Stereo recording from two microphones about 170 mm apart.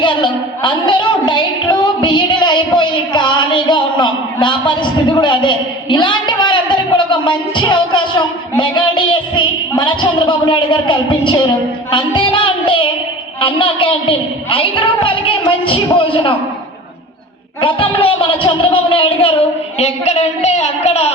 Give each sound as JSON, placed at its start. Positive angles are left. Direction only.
{"t": 0.0, "sound": "a sound", "side_deg": 30}
{"t": 13.4, "sound": "a woman's voice", "side_deg": 30}
{"t": 17.6, "sound": "a woman's voice", "side_deg": 30}